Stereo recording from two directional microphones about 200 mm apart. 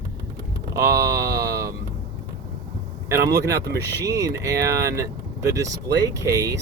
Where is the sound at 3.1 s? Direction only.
15° right (ahead or behind).